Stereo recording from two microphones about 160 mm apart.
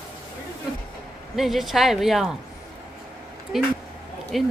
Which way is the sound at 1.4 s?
Centre (ahead or behind).